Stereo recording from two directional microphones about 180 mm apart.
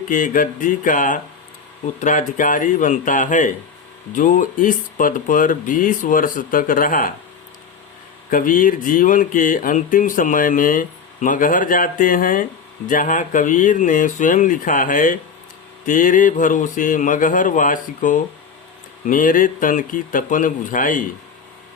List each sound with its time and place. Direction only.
0.1 s speech: 45° left (ahead or behind)
8.3 s speech: 50° left (ahead or behind)